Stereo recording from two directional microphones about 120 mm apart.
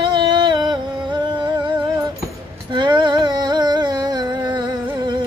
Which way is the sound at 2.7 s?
40° right (ahead or behind).